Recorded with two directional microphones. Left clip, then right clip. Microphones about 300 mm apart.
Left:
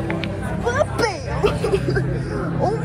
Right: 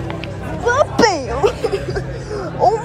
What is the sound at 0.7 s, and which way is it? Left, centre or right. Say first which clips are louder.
Music: right 7 dB; right.